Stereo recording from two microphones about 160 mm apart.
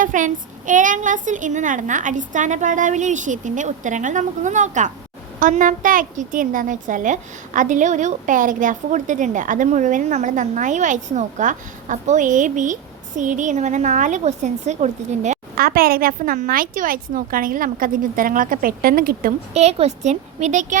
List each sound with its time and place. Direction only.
0.0 s a woman's voice: 55° right (ahead or behind)
15.5 s a woman's voice: 65° right (ahead or behind)
19.5 s a woman's voice: 45° right (ahead or behind)